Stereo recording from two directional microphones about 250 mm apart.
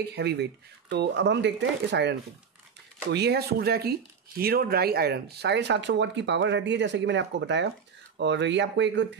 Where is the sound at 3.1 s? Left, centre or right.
Right.